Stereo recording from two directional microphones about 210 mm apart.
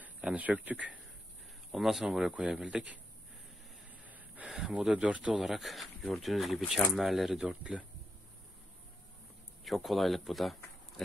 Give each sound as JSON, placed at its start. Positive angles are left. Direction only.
{"t": 0.0, "sound": "a man's voice", "side_deg": -5}
{"t": 4.0, "sound": "speech", "side_deg": -5}
{"t": 9.7, "sound": "speech", "side_deg": 0}